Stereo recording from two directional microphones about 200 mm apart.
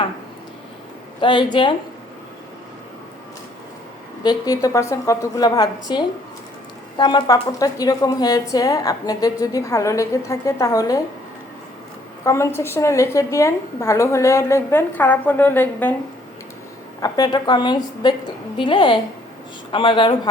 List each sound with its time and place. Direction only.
1.2 s a woman's voice: 25° left (ahead or behind)
4.2 s a woman's voice: 20° left (ahead or behind)
12.2 s a woman's voice: 15° left (ahead or behind)
17.0 s a woman's voice: 20° left (ahead or behind)